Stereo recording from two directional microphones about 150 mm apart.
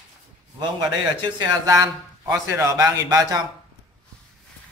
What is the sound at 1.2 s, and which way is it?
A man's voice, 25° right (ahead or behind).